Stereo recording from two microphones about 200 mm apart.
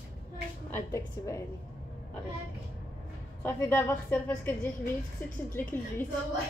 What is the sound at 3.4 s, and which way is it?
A woman's voice, 10° left (ahead or behind).